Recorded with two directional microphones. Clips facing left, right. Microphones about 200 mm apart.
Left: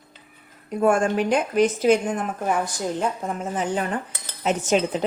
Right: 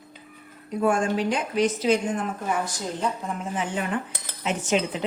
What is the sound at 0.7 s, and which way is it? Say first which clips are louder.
A woman's voice: left 3 dB; 50° left (ahead or behind).